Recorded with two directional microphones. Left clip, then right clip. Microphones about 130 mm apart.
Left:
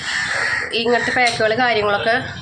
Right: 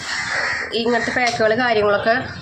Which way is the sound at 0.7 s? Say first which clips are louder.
Left 2 dB; 20° right (ahead or behind).